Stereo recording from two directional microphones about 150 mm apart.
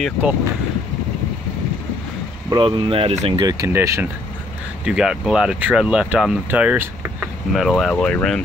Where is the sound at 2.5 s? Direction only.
30° right (ahead or behind).